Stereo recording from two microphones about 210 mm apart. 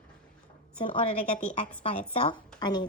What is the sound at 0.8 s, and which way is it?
A woman's voice, 25° left (ahead or behind).